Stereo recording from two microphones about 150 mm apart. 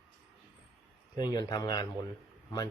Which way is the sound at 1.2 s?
25° left (ahead or behind).